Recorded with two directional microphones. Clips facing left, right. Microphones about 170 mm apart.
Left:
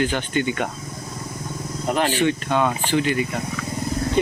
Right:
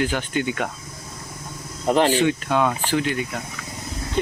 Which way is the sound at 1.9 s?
25° right (ahead or behind).